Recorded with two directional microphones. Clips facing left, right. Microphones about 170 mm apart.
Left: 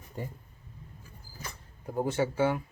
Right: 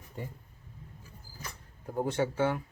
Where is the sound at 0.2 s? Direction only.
40° left (ahead or behind).